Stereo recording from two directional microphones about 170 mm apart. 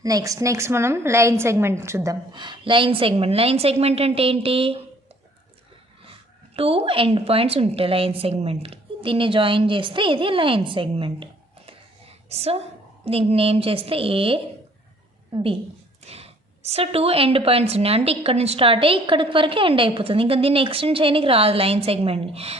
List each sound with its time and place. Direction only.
0.0 s a woman's voice: 20° right (ahead or behind)
2.3 s a woman's voice: 25° right (ahead or behind)
6.5 s a woman's voice: 35° right (ahead or behind)
16.0 s a woman's voice: 35° right (ahead or behind)